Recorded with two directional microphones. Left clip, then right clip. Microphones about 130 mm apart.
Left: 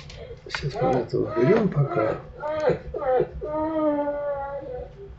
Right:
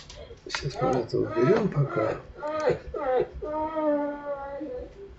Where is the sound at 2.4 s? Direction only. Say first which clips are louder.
Left 3 dB; 20° right (ahead or behind).